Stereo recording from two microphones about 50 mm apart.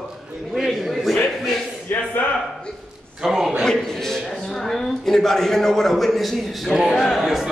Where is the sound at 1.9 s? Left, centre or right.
Left.